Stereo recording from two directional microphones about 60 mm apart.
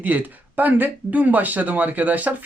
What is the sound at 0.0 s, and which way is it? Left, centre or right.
Speech, right.